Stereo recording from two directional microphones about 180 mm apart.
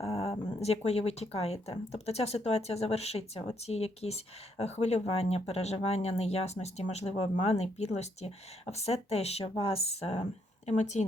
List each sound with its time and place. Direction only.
0.0 s speech: 35° left (ahead or behind)